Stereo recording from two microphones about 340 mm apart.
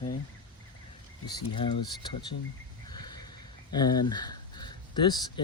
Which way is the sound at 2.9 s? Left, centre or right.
Centre.